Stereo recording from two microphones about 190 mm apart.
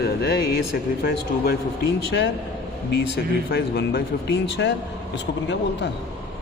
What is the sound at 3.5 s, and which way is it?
Speech, 60° left (ahead or behind).